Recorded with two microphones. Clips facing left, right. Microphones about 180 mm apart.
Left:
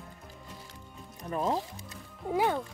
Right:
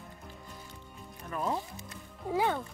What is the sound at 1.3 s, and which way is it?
Speech, 35° left (ahead or behind).